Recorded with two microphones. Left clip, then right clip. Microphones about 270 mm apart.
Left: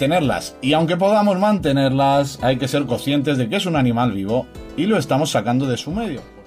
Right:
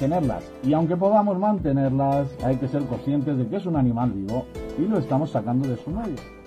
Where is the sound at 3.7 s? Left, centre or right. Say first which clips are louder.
Left 4 dB; left.